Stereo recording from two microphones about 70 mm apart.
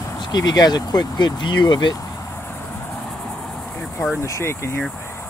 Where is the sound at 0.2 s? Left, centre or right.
Left.